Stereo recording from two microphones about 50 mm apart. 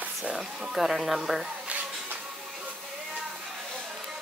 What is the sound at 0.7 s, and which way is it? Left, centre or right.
Speech, centre.